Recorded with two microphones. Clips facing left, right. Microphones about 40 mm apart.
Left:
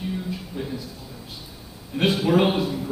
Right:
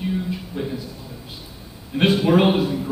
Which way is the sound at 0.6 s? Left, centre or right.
Right.